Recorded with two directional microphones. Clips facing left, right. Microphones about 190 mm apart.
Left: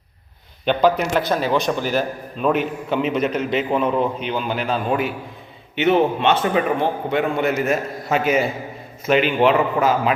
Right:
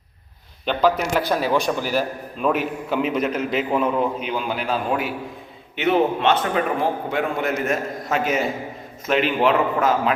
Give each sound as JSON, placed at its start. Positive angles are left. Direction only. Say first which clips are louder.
{"t": 0.6, "sound": "a man's voice", "louder": "left 2 dB", "side_deg": 0}